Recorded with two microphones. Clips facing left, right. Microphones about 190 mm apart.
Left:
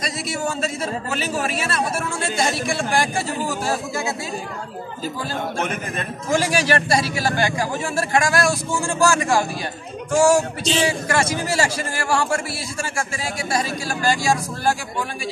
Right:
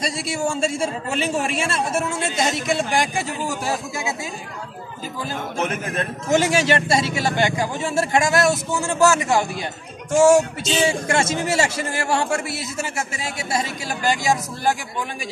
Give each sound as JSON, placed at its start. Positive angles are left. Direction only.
{"t": 0.0, "sound": "a man's voice", "side_deg": -30}
{"t": 5.6, "sound": "a man's voice", "side_deg": 0}
{"t": 6.3, "sound": "a man's voice", "side_deg": -25}